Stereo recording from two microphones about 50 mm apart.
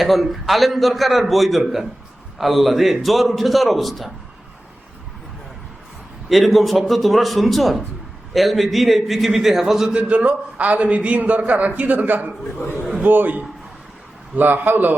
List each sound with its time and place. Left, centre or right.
0.0 s a man's voice: centre
6.2 s a man's voice: centre
9.9 s a man's voice: right
12.5 s a man's voice: left
13.0 s a man's voice: right